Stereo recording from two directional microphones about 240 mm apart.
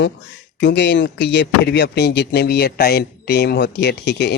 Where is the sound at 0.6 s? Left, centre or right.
Left.